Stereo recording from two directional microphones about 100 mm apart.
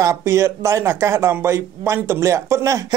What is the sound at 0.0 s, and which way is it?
Speech, 30° right (ahead or behind).